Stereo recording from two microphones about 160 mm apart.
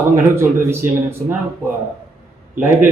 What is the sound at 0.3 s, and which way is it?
Speech, 15° right (ahead or behind).